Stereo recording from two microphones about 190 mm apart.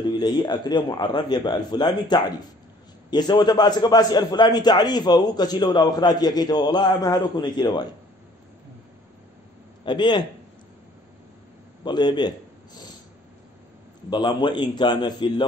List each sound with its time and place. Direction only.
0.1 s a man's voice: 25° left (ahead or behind)
9.8 s a man's voice: 25° left (ahead or behind)
11.8 s a man's voice: 25° left (ahead or behind)
14.1 s a man's voice: 25° left (ahead or behind)